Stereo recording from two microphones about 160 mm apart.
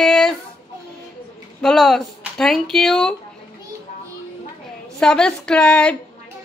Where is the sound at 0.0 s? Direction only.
Centre (ahead or behind).